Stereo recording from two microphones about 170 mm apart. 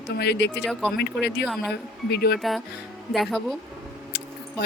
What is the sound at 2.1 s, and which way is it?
Speech, 70° left (ahead or behind).